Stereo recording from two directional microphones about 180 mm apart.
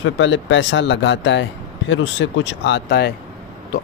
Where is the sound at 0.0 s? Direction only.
90° left; by 3.1 s 75° left (ahead or behind).